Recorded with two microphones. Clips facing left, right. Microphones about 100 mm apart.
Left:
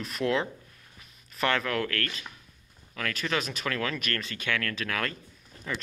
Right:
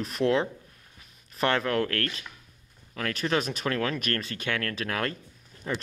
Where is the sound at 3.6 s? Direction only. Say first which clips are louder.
Right 3 dB; 30° right (ahead or behind).